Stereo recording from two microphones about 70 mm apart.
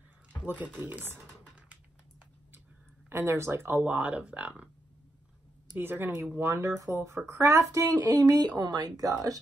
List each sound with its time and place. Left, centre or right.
0.7 s computer keyboard: right
3.1 s speech: right; by 4.6 s centre
5.8 s speech: right